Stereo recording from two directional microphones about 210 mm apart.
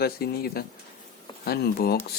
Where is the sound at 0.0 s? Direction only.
45° left (ahead or behind).